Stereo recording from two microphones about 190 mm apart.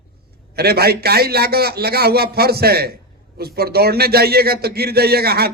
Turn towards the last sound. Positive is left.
turn(degrees=-55)  # may be behind; listen again after turning